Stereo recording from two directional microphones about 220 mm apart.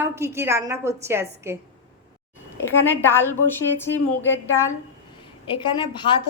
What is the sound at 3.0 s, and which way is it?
A woman's voice, 10° left (ahead or behind).